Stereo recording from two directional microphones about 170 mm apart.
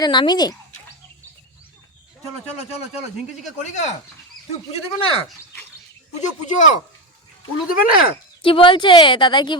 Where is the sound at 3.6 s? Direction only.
45° left (ahead or behind).